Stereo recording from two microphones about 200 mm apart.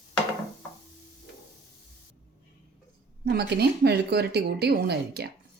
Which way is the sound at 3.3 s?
55° right (ahead or behind).